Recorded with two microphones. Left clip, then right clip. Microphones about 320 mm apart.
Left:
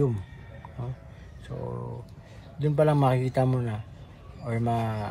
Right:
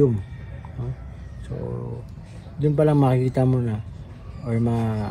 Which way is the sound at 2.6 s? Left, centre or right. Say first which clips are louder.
Right 4 dB; centre.